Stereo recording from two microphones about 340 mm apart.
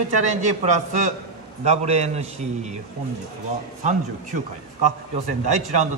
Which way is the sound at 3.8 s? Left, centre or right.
Right.